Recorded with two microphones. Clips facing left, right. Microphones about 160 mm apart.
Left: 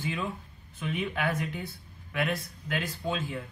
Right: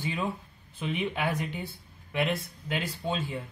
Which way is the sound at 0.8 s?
25° right (ahead or behind).